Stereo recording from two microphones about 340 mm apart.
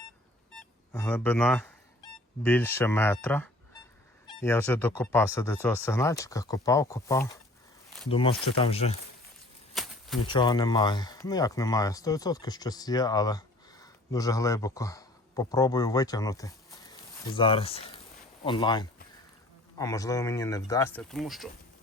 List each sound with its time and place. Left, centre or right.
0.5 s speech: centre
9.7 s a sound: centre
10.2 s speech: centre